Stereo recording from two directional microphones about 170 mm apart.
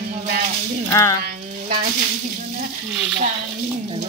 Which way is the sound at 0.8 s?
15° left (ahead or behind).